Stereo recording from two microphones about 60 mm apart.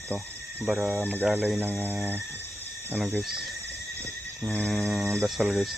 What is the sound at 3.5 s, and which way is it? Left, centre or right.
Horse, right.